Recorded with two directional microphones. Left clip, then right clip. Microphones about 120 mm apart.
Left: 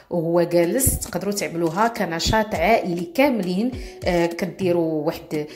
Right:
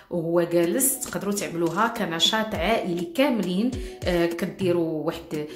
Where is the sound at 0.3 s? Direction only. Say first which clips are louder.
Left 3 dB; 35° left (ahead or behind).